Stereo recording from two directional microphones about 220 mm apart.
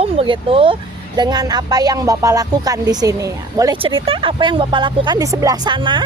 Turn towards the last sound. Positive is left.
turn(degrees=-20)  # may be behind; listen again after turning